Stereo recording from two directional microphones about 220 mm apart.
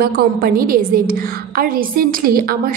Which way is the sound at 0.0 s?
40° right (ahead or behind).